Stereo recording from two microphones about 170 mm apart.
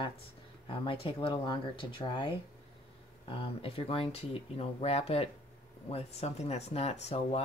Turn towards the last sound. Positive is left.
turn(degrees=40)  # may be behind; listen again after turning